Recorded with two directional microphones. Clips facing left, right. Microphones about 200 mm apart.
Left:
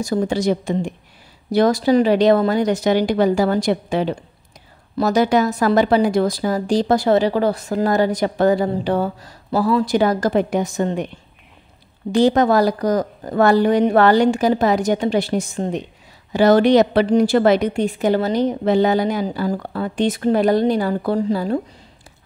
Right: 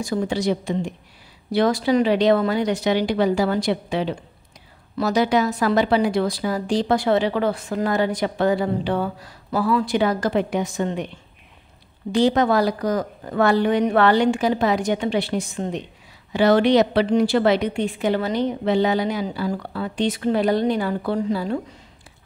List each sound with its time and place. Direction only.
0.0 s a woman's voice: 40° left (ahead or behind)
12.1 s a woman's voice: 45° left (ahead or behind)